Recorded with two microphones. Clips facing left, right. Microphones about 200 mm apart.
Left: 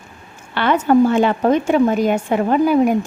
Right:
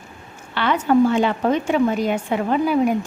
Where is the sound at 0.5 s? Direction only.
50° left (ahead or behind).